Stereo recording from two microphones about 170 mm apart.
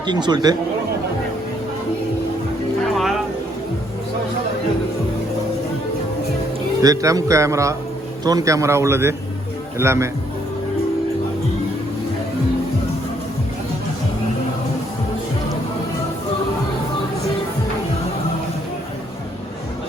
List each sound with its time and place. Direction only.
0.0 s speech: 25° right (ahead or behind)
2.8 s music: centre (ahead or behind)
6.8 s a man's voice: 20° right (ahead or behind)